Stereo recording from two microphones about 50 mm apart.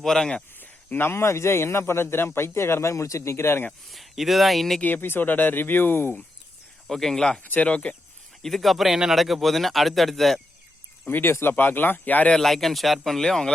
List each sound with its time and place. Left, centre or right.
0.0 s speech: centre
0.6 s a sound: left
1.1 s speech: left
3.8 s speech: centre
4.8 s speech: left
6.8 s speech: centre
7.4 s speech: left
8.4 s speech: centre
11.3 s speech: left
11.5 s speech: left
12.3 s speech: centre